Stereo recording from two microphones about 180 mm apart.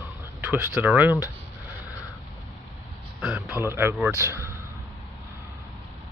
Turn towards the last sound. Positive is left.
turn(degrees=-15)  # may be behind; listen again after turning